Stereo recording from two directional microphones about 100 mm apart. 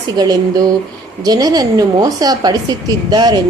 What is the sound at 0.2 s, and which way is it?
A woman's voice, 40° right (ahead or behind).